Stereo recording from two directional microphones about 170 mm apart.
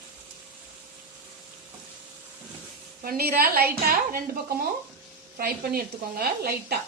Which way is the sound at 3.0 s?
60° right (ahead or behind).